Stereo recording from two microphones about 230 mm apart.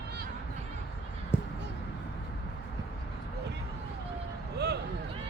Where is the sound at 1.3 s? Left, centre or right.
Centre.